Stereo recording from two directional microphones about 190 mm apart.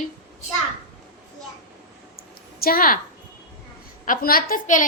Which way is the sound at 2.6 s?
50° left (ahead or behind).